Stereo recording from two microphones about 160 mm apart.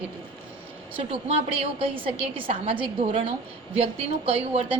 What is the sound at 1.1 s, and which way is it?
A woman's voice, 35° right (ahead or behind).